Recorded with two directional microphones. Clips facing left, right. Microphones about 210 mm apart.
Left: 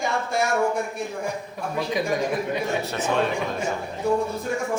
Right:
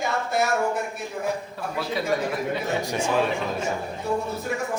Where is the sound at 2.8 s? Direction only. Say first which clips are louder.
Right 1 dB; 15° right (ahead or behind).